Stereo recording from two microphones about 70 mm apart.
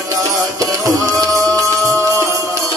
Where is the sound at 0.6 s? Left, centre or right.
Right.